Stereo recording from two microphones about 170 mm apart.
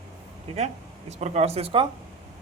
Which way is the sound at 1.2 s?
40° right (ahead or behind).